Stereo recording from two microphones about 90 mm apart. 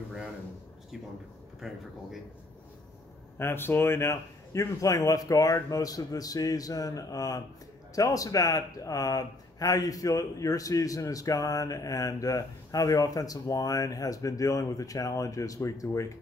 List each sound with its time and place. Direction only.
1.6 s speech: 5° right (ahead or behind)
3.3 s speech: 25° left (ahead or behind)